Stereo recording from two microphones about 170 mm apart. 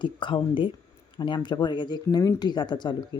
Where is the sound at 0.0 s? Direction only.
30° left (ahead or behind).